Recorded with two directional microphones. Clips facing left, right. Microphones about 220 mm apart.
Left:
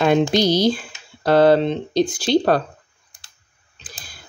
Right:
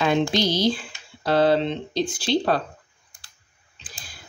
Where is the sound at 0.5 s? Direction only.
40° left (ahead or behind).